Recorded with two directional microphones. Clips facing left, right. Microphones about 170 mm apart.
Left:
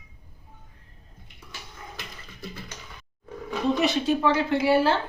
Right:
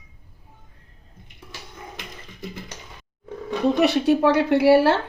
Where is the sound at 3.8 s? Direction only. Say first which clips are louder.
Right 8 dB; 65° right (ahead or behind).